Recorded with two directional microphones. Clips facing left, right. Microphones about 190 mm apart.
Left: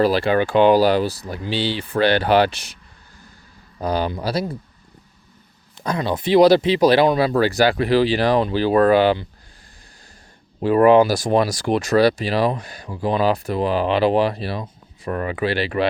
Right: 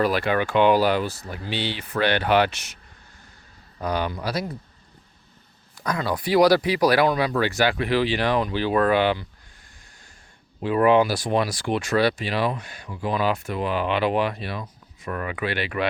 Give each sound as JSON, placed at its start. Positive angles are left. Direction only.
{"t": 0.0, "sound": "speech", "side_deg": 30}
{"t": 3.8, "sound": "speech", "side_deg": 30}
{"t": 5.8, "sound": "speech", "side_deg": 25}
{"t": 10.6, "sound": "speech", "side_deg": 40}